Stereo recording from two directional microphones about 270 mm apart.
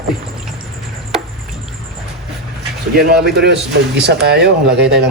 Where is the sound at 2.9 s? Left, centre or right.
Right.